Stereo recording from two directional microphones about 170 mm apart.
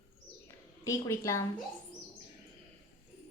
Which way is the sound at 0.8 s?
15° left (ahead or behind).